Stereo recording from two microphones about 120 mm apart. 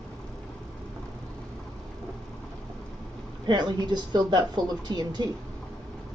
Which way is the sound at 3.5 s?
35° right (ahead or behind).